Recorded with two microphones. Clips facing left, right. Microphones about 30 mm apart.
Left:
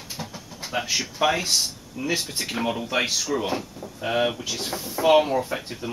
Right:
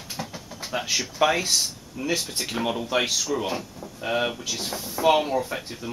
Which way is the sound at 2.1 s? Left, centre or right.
Left.